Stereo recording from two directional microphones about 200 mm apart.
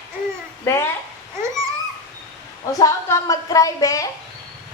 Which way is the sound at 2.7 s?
15° left (ahead or behind).